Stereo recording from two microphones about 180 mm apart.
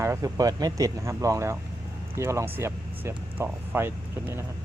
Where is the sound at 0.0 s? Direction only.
15° right (ahead or behind).